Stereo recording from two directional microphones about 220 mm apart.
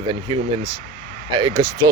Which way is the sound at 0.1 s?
20° right (ahead or behind).